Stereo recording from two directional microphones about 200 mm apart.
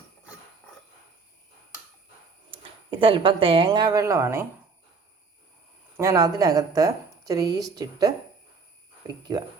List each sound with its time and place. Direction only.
2.5 s speech: 25° right (ahead or behind)
6.0 s a woman's voice: 15° right (ahead or behind)
9.3 s speech: 20° right (ahead or behind)